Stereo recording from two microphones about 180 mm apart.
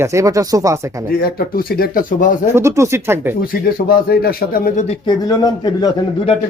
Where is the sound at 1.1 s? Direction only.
55° left (ahead or behind).